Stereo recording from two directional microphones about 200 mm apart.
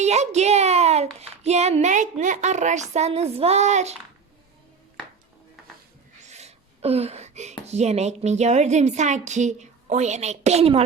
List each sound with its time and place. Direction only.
0.0 s a child's voice: 35° right (ahead or behind)
6.2 s speech: 35° right (ahead or behind)